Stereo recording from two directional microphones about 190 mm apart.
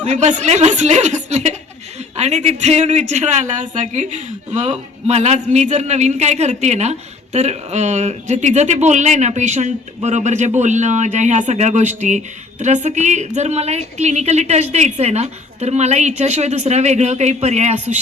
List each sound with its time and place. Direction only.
0.0 s speech: 40° right (ahead or behind)